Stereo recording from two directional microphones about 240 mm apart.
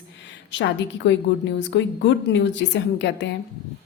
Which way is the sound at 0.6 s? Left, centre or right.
Left.